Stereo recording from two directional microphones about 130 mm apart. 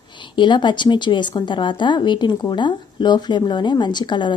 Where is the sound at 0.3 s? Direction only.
35° left (ahead or behind).